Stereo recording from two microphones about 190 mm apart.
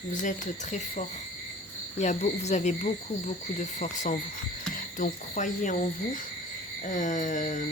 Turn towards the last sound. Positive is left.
turn(degrees=40)  # may be behind; listen again after turning